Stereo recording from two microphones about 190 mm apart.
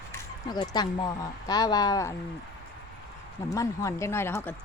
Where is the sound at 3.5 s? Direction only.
15° left (ahead or behind).